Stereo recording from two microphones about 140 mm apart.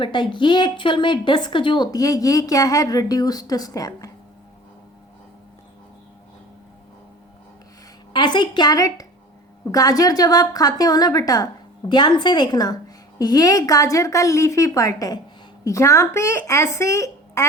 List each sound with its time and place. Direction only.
0.0 s a woman's voice: 35° left (ahead or behind)
8.1 s a woman's voice: 35° left (ahead or behind)